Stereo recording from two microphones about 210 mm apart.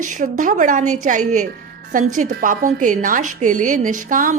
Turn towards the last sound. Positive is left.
turn(degrees=-40)  # may be behind; listen again after turning